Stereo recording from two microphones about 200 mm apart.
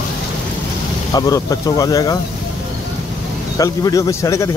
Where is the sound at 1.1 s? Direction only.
15° left (ahead or behind).